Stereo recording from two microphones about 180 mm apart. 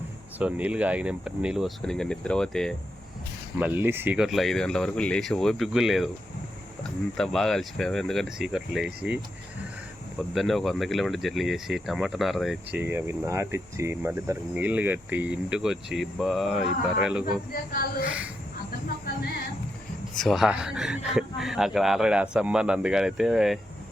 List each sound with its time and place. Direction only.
0.3 s speech: 10° right (ahead or behind)
3.6 s speech: 10° right (ahead or behind)
7.2 s speech: centre (ahead or behind)
12.8 s speech: 15° right (ahead or behind)
17.5 s a woman's voice: 55° left (ahead or behind)
20.1 s speech: centre (ahead or behind)